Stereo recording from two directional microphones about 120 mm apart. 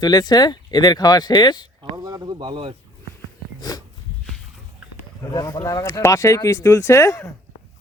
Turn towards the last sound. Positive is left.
turn(degrees=25)  # may be behind; listen again after turning